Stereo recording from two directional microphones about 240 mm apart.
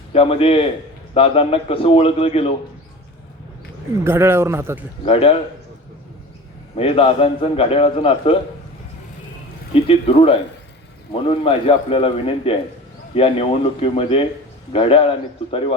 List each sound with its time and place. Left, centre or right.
0.1 s a man's voice: left
4.0 s speech: centre
5.0 s a man's voice: left
6.7 s a man's voice: left
9.8 s a man's voice: left